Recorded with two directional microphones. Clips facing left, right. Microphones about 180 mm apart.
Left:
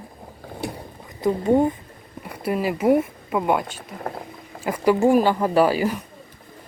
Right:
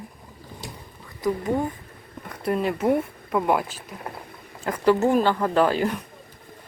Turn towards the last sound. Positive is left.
turn(degrees=5)  # may be behind; listen again after turning